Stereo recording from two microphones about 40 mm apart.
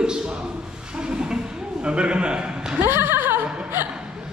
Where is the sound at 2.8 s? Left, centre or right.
Right.